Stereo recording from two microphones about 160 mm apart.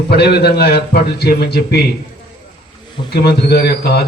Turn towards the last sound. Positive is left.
turn(degrees=85)